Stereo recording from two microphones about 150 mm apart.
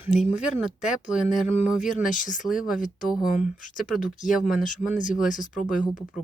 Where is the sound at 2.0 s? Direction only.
60° left (ahead or behind).